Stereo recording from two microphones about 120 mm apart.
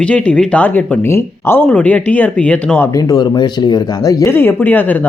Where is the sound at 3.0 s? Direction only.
35° left (ahead or behind); by 4.9 s 15° left (ahead or behind).